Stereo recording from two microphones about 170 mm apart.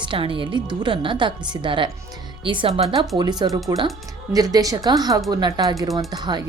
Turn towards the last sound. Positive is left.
turn(degrees=-25)  # may be behind; listen again after turning